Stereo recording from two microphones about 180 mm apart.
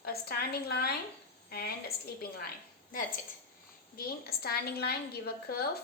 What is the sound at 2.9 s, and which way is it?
Speech, 50° left (ahead or behind).